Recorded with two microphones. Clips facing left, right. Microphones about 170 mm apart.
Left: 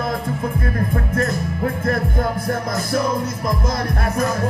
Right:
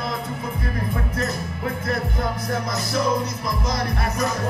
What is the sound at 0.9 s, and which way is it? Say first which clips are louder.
Music: left 5 dB; 50° left (ahead or behind).